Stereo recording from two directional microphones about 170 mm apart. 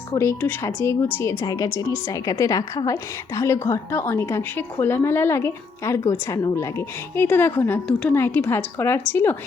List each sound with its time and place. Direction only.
0.1 s a woman's voice: 15° left (ahead or behind)